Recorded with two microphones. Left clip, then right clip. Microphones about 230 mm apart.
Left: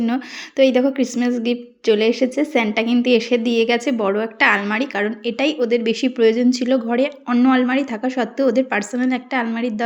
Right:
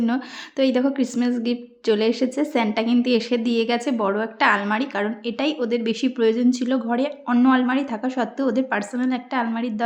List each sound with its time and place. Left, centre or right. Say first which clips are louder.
0.0 s a woman's voice: left 2 dB; centre